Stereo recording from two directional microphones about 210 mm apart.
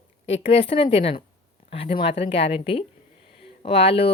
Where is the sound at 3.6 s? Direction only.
30° left (ahead or behind).